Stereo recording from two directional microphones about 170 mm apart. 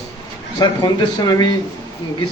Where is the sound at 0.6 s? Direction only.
25° left (ahead or behind).